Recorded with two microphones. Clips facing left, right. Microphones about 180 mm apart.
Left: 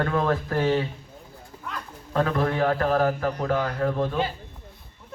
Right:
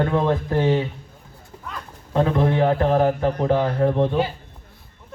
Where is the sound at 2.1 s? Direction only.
20° right (ahead or behind).